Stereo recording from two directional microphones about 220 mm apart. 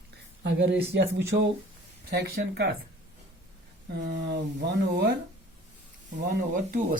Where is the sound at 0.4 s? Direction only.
55° right (ahead or behind).